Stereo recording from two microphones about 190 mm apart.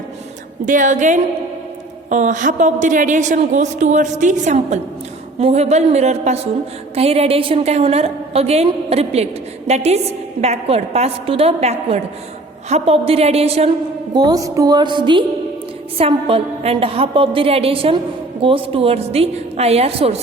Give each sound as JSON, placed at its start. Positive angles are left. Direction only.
{"t": 0.6, "sound": "a woman's voice", "side_deg": -40}
{"t": 14.1, "sound": "a woman's voice", "side_deg": -20}